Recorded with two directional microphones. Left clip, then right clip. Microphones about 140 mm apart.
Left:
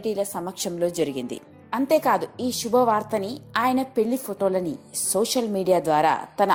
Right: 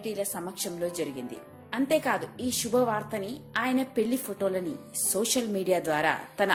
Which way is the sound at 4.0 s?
30° left (ahead or behind).